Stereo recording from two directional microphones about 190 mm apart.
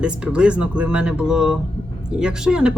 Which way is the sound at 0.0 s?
5° right (ahead or behind).